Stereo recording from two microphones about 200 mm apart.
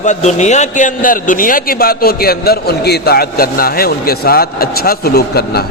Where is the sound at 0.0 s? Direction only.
35° left (ahead or behind).